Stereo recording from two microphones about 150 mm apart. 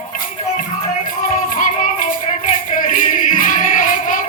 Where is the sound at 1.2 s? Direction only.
60° left (ahead or behind).